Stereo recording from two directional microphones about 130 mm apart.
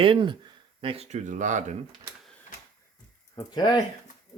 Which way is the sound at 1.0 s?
65° right (ahead or behind).